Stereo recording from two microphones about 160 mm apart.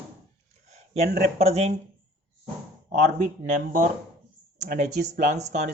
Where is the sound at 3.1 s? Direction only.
55° right (ahead or behind).